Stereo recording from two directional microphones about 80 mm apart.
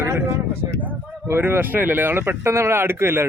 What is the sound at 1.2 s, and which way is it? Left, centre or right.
Speech, right.